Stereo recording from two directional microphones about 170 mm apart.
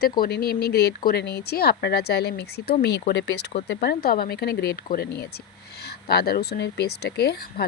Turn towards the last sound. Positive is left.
turn(degrees=70)  # may be behind; listen again after turning